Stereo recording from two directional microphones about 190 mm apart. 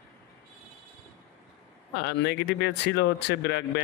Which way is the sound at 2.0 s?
60° left (ahead or behind).